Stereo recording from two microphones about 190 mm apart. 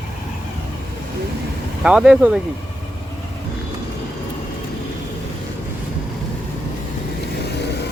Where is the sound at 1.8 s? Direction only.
5° right (ahead or behind).